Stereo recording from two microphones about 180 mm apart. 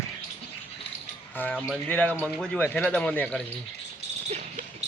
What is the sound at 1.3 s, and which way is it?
Speech, 10° left (ahead or behind).